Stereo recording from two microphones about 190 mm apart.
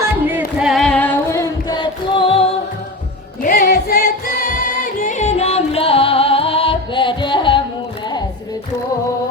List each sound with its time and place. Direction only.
0.3 s singing: 5° right (ahead or behind); by 2.5 s 30° left (ahead or behind)
3.4 s singing: 50° left (ahead or behind); by 7.6 s 25° left (ahead or behind)